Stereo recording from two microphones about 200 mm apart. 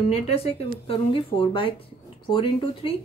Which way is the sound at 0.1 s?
30° left (ahead or behind).